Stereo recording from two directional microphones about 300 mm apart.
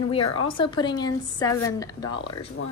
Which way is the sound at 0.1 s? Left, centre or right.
Centre.